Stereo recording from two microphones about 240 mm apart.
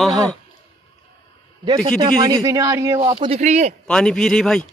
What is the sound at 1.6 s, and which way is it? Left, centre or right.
A man's voice, centre.